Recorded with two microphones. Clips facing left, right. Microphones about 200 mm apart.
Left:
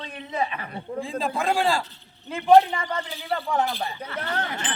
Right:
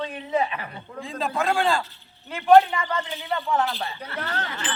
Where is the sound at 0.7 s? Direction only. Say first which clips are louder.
Left 6 dB; 30° left (ahead or behind).